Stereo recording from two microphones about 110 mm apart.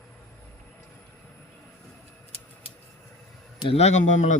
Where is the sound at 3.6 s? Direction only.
80° left.